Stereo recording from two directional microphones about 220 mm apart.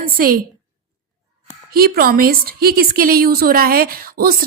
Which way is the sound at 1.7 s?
45° right (ahead or behind).